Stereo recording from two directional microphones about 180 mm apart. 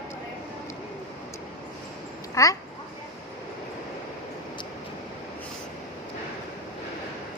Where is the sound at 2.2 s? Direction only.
20° left (ahead or behind).